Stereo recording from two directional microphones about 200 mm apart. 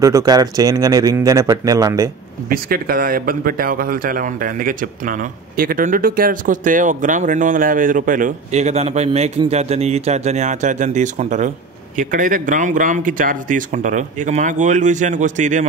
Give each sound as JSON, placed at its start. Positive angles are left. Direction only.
{"t": 0.0, "sound": "speech", "side_deg": -15}
{"t": 2.5, "sound": "speech", "side_deg": -45}